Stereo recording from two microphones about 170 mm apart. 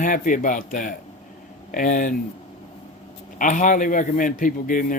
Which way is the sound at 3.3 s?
50° left (ahead or behind).